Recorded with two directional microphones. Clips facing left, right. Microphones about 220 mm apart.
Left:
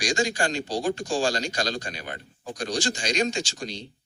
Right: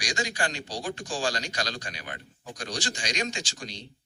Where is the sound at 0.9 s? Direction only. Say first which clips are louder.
Left 5 dB; 25° left (ahead or behind).